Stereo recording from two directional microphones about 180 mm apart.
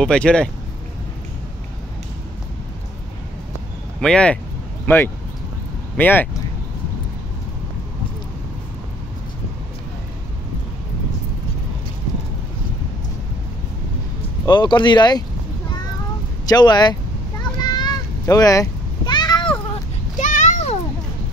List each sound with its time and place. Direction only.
0.0 s speech: 5° left (ahead or behind)
4.0 s speech: 5° left (ahead or behind)
14.4 s speech: 25° left (ahead or behind)
16.4 s speech: 25° left (ahead or behind)
17.4 s a sound: 25° left (ahead or behind)
20.2 s a sound: 45° left (ahead or behind)